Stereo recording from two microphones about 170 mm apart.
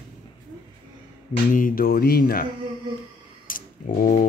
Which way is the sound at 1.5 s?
55° left (ahead or behind).